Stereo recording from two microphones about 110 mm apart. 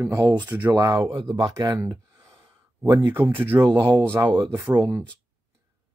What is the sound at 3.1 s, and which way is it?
Speech, 20° right (ahead or behind).